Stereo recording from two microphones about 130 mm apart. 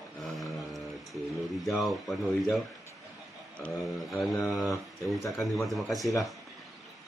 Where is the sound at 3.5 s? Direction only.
5° left (ahead or behind).